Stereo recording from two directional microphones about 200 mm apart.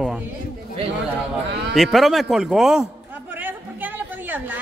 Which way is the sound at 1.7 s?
Centre (ahead or behind).